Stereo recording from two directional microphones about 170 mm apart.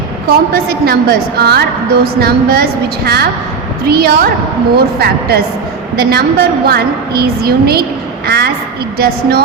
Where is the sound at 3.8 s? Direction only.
60° right (ahead or behind).